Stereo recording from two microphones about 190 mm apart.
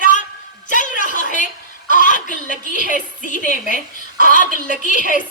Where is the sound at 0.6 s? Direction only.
40° left (ahead or behind).